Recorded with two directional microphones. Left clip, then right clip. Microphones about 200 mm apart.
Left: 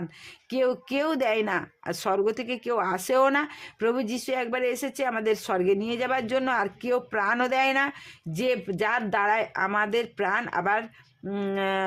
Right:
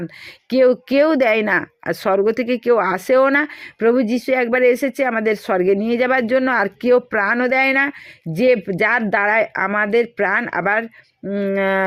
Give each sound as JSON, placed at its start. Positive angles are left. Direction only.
{"t": 0.5, "sound": "speech", "side_deg": -20}